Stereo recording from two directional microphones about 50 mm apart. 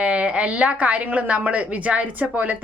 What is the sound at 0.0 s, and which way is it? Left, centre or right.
Speech, right.